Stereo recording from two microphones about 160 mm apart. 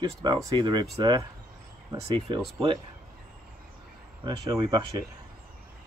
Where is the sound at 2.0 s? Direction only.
35° right (ahead or behind).